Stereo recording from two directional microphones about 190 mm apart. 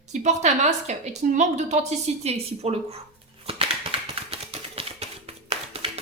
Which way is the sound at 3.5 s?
30° right (ahead or behind).